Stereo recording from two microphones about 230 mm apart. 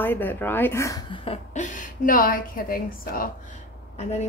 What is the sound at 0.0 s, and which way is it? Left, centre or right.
A woman's voice, centre.